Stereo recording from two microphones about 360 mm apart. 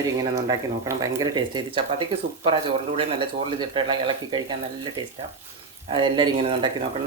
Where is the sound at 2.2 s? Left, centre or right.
Right.